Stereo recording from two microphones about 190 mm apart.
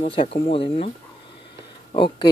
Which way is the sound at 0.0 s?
30° left (ahead or behind).